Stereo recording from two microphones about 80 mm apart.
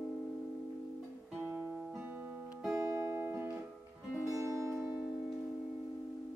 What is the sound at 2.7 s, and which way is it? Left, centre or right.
Music, right.